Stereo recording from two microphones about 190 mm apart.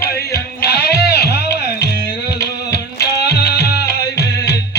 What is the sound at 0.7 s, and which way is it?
Music, 55° left (ahead or behind).